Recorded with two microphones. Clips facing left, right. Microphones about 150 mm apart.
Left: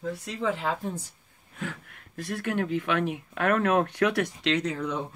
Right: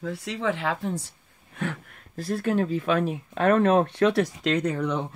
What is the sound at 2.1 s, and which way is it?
Speech, 30° right (ahead or behind).